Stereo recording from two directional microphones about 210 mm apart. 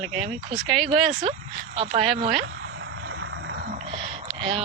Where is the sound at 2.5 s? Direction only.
55° right (ahead or behind).